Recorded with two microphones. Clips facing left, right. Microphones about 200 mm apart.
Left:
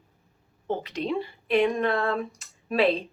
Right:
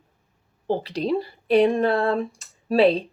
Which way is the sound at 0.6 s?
35° right (ahead or behind).